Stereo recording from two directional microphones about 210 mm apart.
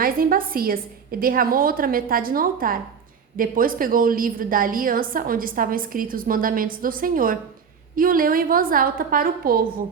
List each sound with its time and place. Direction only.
0.0 s a woman's voice: 45° right (ahead or behind)